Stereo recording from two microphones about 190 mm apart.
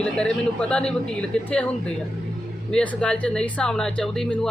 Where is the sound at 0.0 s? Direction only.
5° left (ahead or behind).